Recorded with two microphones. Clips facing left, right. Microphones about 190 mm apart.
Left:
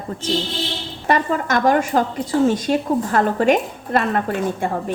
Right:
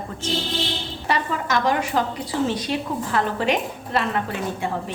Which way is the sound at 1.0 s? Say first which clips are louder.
Left 6 dB; 50° left (ahead or behind).